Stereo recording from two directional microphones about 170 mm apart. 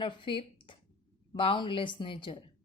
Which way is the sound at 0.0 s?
30° left (ahead or behind).